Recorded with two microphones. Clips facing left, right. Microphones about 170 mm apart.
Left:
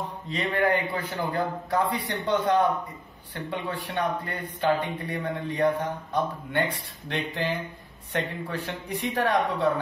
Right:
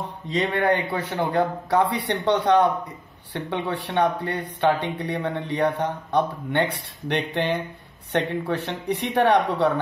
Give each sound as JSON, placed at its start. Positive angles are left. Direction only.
{"t": 0.4, "sound": "speech", "side_deg": -70}